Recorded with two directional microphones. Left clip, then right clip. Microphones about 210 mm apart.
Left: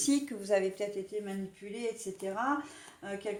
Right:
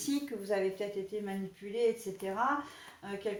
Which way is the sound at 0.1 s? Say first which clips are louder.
Left 3 dB; 45° left (ahead or behind).